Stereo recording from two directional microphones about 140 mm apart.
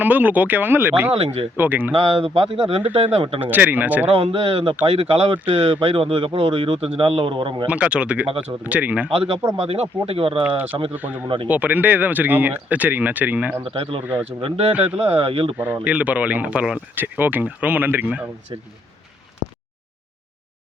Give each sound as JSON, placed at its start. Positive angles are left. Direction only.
{"t": 0.0, "sound": "speech", "side_deg": -10}
{"t": 1.1, "sound": "speech", "side_deg": -40}
{"t": 1.5, "sound": "speech", "side_deg": -15}
{"t": 1.9, "sound": "speech", "side_deg": -40}
{"t": 3.4, "sound": "speech", "side_deg": -10}
{"t": 4.1, "sound": "speech", "side_deg": -45}
{"t": 7.7, "sound": "speech", "side_deg": -10}
{"t": 9.6, "sound": "speech", "side_deg": -45}
{"t": 10.9, "sound": "speech", "side_deg": -10}
{"t": 13.7, "sound": "speech", "side_deg": -40}
{"t": 14.0, "sound": "speech", "side_deg": -15}
{"t": 14.4, "sound": "speech", "side_deg": -45}
{"t": 15.5, "sound": "speech", "side_deg": -10}